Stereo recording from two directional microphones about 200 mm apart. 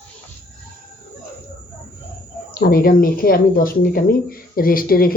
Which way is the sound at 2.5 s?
50° left (ahead or behind).